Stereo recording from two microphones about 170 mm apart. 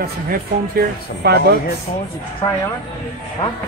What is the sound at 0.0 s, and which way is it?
Speech, 65° right (ahead or behind).